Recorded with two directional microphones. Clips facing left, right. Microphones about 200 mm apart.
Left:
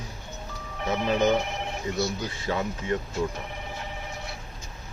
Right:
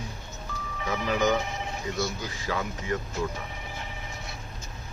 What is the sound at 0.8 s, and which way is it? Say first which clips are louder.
Speech: left 3 dB; 25° left (ahead or behind).